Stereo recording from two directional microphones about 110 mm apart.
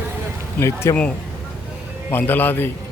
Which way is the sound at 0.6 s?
25° left (ahead or behind).